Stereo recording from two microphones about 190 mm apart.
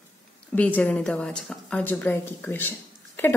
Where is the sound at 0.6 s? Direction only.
10° left (ahead or behind).